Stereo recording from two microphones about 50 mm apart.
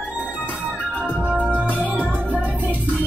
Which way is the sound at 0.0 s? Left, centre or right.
Right.